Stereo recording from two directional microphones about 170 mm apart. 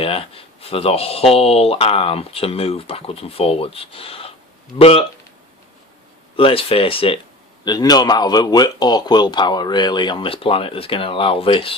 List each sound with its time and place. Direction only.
0.0 s speech: 35° left (ahead or behind)
6.3 s speech: 35° left (ahead or behind)